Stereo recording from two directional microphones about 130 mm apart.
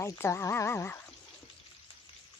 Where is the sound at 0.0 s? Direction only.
20° left (ahead or behind).